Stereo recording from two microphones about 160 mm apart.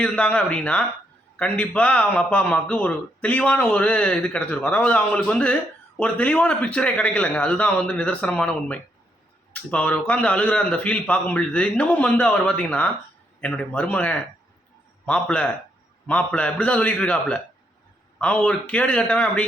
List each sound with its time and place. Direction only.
0.0 s a man's voice: 5° left (ahead or behind)